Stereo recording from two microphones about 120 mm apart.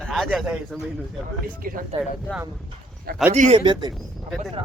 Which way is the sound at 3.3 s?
80° right.